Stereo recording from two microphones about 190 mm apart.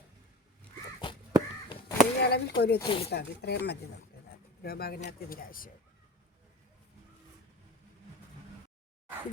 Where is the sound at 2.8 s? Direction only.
25° left (ahead or behind).